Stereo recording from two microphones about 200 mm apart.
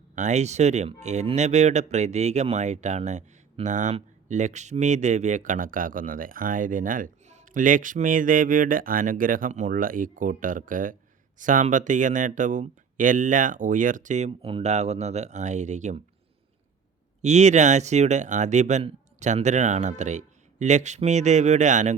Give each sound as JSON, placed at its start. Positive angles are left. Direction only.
{"t": 0.2, "sound": "speech", "side_deg": -35}
{"t": 17.2, "sound": "speech", "side_deg": -35}